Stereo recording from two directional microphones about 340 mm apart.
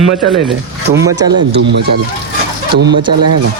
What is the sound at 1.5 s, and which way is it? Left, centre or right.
A man's voice, right.